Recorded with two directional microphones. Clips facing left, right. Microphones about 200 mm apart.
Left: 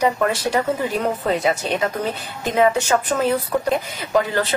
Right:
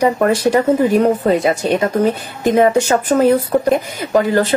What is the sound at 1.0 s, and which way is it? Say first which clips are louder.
Speech: right 7 dB; 35° right (ahead or behind).